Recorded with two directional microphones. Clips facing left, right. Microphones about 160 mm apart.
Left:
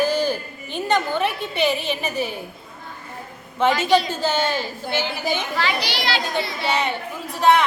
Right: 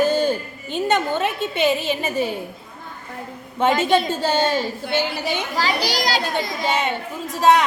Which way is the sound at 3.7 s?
50° right (ahead or behind).